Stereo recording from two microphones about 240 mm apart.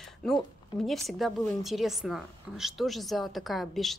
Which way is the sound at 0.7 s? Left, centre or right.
Centre.